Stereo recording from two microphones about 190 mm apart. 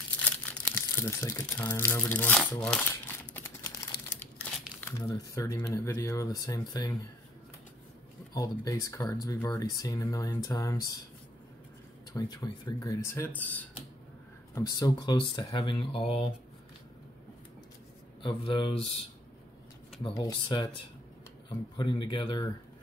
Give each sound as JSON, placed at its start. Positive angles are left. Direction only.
{"t": 0.2, "sound": "speech", "side_deg": 10}
{"t": 3.3, "sound": "typing", "side_deg": 15}
{"t": 4.7, "sound": "speech", "side_deg": 10}
{"t": 8.4, "sound": "speech", "side_deg": 15}
{"t": 12.1, "sound": "speech", "side_deg": 20}
{"t": 14.5, "sound": "speech", "side_deg": 20}
{"t": 18.2, "sound": "speech", "side_deg": 25}
{"t": 20.0, "sound": "speech", "side_deg": 20}